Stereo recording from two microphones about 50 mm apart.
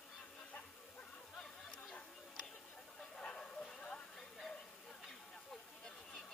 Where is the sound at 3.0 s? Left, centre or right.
Centre.